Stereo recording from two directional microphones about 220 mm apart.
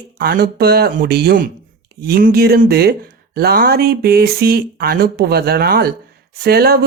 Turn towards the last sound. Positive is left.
turn(degrees=-45)  # may be behind; listen again after turning